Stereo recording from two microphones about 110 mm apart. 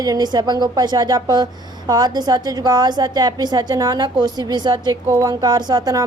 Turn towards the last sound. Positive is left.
turn(degrees=-35)  # may be behind; listen again after turning